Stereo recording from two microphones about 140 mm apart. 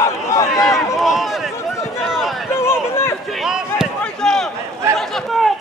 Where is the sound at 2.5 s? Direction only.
15° left (ahead or behind).